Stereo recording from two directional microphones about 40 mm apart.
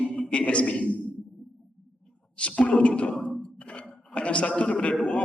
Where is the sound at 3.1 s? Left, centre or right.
Centre.